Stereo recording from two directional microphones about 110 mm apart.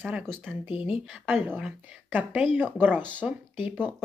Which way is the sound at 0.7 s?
55° left (ahead or behind).